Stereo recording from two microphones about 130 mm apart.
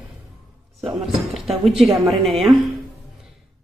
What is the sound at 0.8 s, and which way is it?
Speech, centre (ahead or behind).